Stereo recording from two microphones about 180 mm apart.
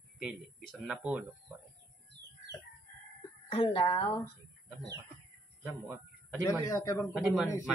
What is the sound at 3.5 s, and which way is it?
Speech, 30° left (ahead or behind).